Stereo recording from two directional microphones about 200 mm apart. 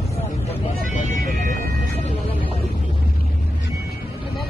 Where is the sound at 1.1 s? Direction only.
40° right (ahead or behind).